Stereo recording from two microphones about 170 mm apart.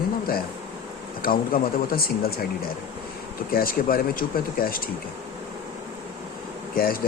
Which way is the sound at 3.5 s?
60° left (ahead or behind).